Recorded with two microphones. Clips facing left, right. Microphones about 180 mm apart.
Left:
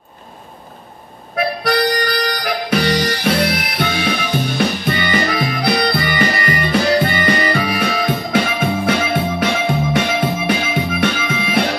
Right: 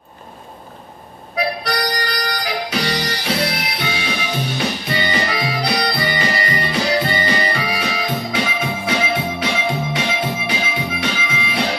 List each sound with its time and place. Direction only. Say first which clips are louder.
1.3 s harmonica: left 4 dB; 55° left (ahead or behind)
4.6 s music: left 4 dB; 55° left (ahead or behind)